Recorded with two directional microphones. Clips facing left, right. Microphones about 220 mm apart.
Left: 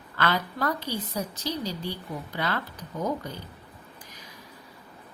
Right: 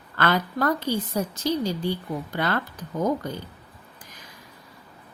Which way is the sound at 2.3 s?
50° right (ahead or behind).